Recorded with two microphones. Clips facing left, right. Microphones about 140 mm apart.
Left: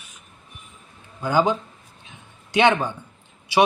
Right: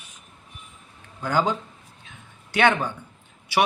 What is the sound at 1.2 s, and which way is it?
Speech, 10° left (ahead or behind).